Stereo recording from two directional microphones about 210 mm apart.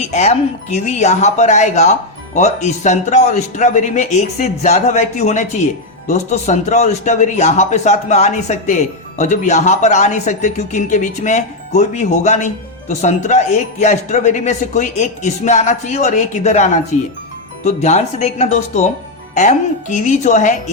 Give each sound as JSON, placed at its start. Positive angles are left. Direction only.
{"t": 0.0, "sound": "a man's voice", "side_deg": 30}